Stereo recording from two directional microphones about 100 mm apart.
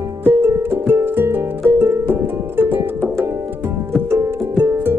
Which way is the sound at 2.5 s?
20° right (ahead or behind).